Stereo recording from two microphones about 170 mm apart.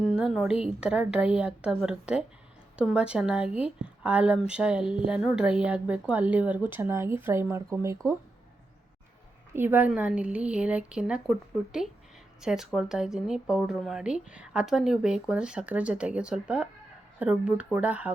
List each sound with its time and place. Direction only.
0.0 s speech: centre (ahead or behind); by 7.9 s 15° right (ahead or behind)
9.5 s speech: 10° right (ahead or behind)